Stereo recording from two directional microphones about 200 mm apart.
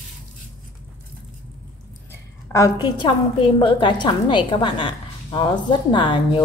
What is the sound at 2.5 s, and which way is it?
A woman's voice, 20° left (ahead or behind).